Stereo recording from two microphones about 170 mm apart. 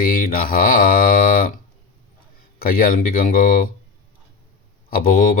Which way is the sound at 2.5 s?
60° left (ahead or behind).